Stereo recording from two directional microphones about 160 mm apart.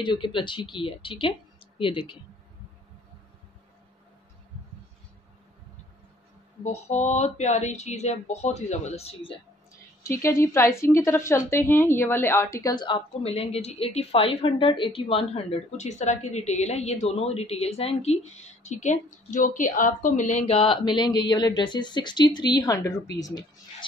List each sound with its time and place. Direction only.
0.0 s a woman's voice: 30° left (ahead or behind)
6.6 s speech: 45° left (ahead or behind)
10.0 s a woman's voice: 15° left (ahead or behind); by 20.5 s 50° left (ahead or behind)
20.5 s speech: 30° left (ahead or behind)